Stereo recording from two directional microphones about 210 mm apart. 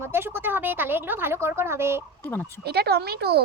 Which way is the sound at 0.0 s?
10° right (ahead or behind).